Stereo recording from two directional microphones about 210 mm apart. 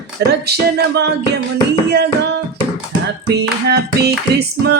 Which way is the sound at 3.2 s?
50° right (ahead or behind).